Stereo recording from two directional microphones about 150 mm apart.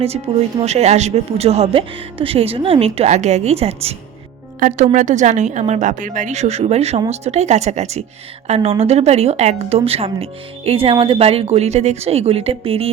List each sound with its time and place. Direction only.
0.3 s speech: 35° right (ahead or behind)
4.6 s speech: 55° right (ahead or behind)